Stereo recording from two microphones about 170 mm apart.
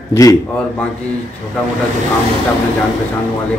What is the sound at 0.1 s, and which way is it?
Speech, 15° left (ahead or behind).